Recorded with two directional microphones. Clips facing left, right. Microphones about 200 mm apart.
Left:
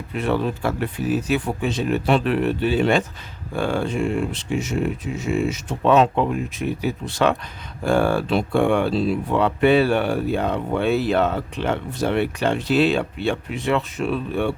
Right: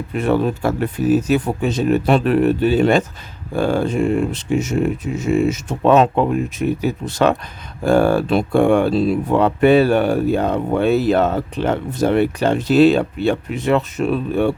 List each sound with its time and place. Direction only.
0.1 s speech: 45° right (ahead or behind)